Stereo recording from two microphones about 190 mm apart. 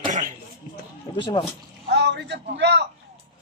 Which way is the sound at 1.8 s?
60° right (ahead or behind).